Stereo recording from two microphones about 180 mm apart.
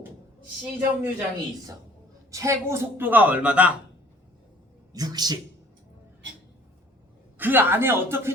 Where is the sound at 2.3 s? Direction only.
15° right (ahead or behind).